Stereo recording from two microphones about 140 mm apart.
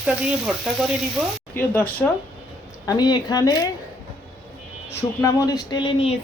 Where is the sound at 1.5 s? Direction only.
15° left (ahead or behind).